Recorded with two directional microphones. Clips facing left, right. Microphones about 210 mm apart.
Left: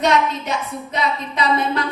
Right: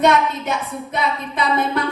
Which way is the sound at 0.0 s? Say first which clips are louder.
Right 2 dB; 55° right (ahead or behind).